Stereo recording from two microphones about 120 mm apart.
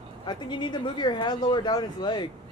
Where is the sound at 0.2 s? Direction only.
40° left (ahead or behind).